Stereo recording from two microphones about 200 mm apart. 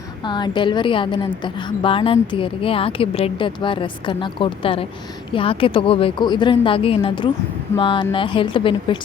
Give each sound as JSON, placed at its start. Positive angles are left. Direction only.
{"t": 0.3, "sound": "a woman's voice", "side_deg": 20}